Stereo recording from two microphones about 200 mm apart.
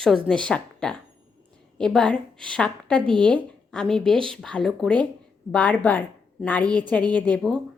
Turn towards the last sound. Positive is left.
turn(degrees=5)  # may be behind; listen again after turning